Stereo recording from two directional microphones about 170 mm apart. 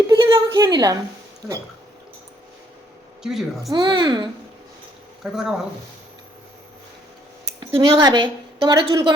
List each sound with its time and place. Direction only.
0.1 s a sound: 25° right (ahead or behind)
0.5 s a woman's voice: 25° right (ahead or behind)
3.2 s a woman's voice: centre (ahead or behind)
3.7 s a woman's voice: 25° right (ahead or behind)
5.2 s a woman's voice: 5° right (ahead or behind)
7.6 s a woman's voice: 25° right (ahead or behind)